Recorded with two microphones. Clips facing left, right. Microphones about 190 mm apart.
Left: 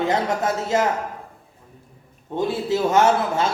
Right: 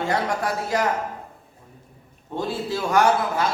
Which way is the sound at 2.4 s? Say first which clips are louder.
Left 5 dB; 20° left (ahead or behind).